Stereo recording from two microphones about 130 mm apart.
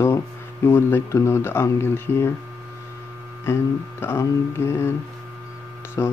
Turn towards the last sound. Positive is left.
turn(degrees=25)  # may be behind; listen again after turning